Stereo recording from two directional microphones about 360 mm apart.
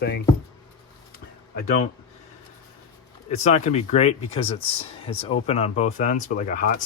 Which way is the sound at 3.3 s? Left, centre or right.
Centre.